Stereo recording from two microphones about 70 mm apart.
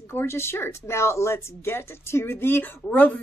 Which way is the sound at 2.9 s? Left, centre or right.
Left.